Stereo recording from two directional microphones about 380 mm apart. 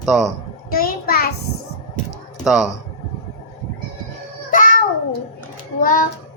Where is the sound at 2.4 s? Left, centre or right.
Centre.